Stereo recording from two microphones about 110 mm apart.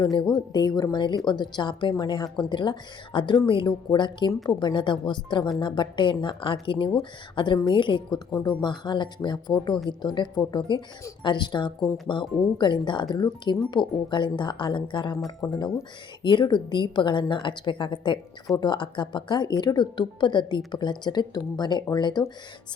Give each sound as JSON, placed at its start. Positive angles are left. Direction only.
{"t": 0.3, "sound": "a woman's voice", "side_deg": 40}